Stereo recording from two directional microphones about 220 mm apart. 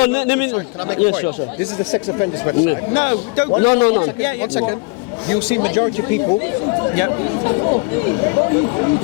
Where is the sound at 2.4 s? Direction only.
20° left (ahead or behind).